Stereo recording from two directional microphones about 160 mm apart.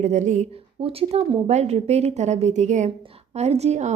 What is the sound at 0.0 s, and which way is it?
A woman's voice, 45° right (ahead or behind).